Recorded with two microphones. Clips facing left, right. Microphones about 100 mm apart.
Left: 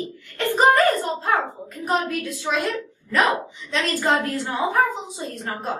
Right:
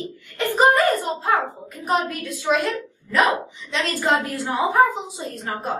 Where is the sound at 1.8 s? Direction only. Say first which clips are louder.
Right 1 dB; 15° right (ahead or behind).